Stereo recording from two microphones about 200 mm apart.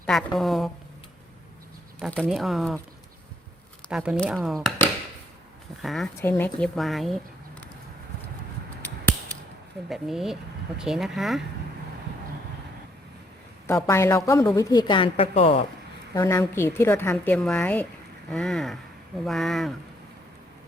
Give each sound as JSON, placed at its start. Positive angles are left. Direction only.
{"t": 0.0, "sound": "a woman's voice", "side_deg": 0}
{"t": 2.0, "sound": "a woman's voice", "side_deg": 5}
{"t": 3.8, "sound": "a woman's voice", "side_deg": -5}
{"t": 5.8, "sound": "a woman's voice", "side_deg": 0}
{"t": 6.1, "sound": "a woman's voice", "side_deg": 10}
{"t": 9.9, "sound": "a woman's voice", "side_deg": 0}
{"t": 13.8, "sound": "a woman's voice", "side_deg": 15}
{"t": 16.1, "sound": "a woman's voice", "side_deg": 15}